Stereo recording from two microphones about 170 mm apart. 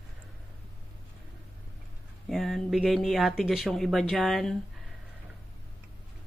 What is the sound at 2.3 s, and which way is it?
Speech, centre (ahead or behind).